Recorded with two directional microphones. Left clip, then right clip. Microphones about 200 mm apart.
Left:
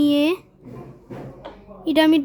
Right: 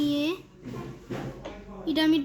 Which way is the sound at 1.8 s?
55° left (ahead or behind).